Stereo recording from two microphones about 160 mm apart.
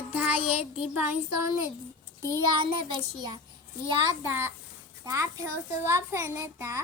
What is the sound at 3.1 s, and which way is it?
Speech, 25° right (ahead or behind).